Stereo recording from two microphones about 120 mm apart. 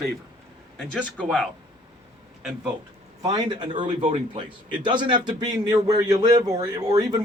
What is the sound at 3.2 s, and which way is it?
Speech, 35° right (ahead or behind).